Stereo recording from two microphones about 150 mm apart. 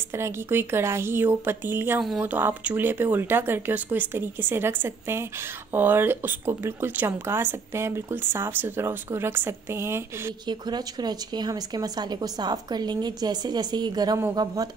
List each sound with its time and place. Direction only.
0.1 s speech: 15° right (ahead or behind)
10.4 s speech: 30° right (ahead or behind)